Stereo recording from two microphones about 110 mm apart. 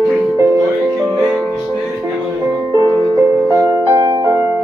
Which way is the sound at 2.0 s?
30° right (ahead or behind).